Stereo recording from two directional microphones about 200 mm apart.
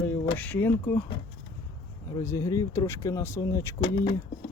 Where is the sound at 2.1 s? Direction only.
15° left (ahead or behind).